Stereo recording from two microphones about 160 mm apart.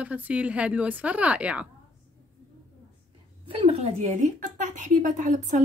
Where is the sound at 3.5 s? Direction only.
40° right (ahead or behind).